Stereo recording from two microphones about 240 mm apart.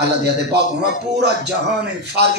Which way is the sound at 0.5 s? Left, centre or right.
Right.